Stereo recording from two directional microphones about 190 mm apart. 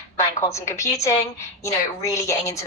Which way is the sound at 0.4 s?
15° left (ahead or behind).